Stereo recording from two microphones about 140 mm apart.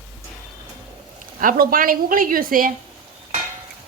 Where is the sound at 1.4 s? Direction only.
85° right.